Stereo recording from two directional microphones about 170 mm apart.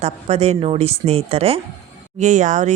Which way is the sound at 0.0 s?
40° right (ahead or behind).